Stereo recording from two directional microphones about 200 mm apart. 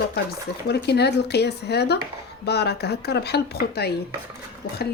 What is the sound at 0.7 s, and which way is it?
Speech, 55° left (ahead or behind).